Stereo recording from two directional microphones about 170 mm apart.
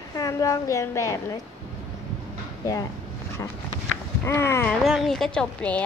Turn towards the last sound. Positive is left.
turn(degrees=10)  # may be behind; listen again after turning